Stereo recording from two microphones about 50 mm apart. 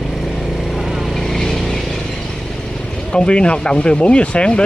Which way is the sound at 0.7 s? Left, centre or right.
Centre.